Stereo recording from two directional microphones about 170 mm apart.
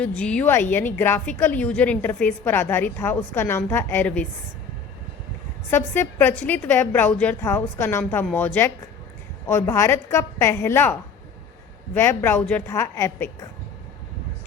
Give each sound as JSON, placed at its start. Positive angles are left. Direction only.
{"t": 0.0, "sound": "a woman's voice", "side_deg": 5}
{"t": 5.7, "sound": "a woman's voice", "side_deg": 15}
{"t": 11.9, "sound": "a woman's voice", "side_deg": 15}